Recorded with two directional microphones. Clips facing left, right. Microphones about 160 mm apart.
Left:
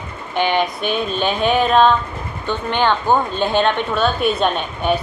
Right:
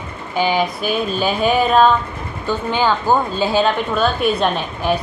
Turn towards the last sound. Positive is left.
turn(degrees=0)  # may be behind; listen again after turning